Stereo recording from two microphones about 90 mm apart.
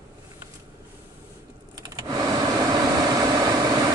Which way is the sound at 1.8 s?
45° right (ahead or behind).